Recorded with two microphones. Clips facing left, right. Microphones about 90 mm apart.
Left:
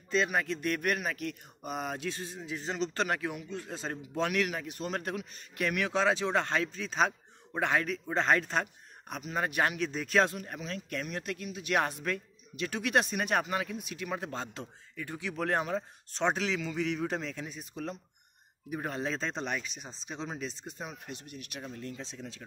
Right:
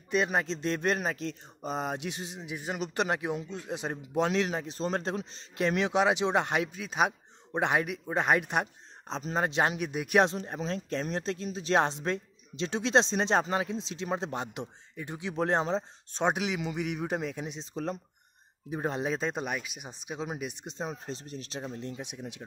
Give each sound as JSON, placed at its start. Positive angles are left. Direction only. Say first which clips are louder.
{"t": 0.1, "sound": "speech", "louder": "right 1 dB", "side_deg": -20}
{"t": 9.1, "sound": "speech", "louder": "right 3 dB", "side_deg": -30}
{"t": 18.7, "sound": "speech", "louder": "right 3 dB", "side_deg": -25}
{"t": 20.8, "sound": "speech", "louder": "right 6 dB", "side_deg": -35}